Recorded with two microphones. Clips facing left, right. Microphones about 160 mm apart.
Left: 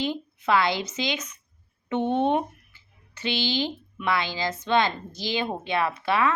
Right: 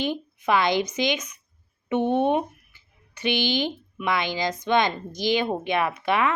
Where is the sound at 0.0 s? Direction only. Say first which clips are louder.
Right 1 dB; 20° right (ahead or behind).